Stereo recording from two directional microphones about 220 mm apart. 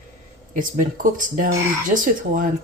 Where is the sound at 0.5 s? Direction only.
35° right (ahead or behind).